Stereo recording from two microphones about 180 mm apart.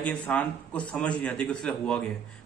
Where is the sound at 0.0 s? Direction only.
5° left (ahead or behind).